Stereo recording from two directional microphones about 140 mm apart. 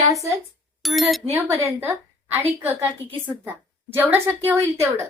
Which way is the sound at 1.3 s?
20° right (ahead or behind).